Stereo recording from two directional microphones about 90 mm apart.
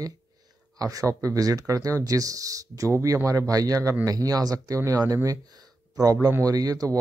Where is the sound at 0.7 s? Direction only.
40° right (ahead or behind).